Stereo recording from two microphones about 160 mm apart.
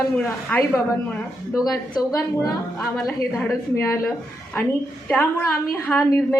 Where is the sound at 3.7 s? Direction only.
20° left (ahead or behind).